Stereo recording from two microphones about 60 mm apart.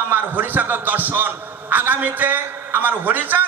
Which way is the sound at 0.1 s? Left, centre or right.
Right.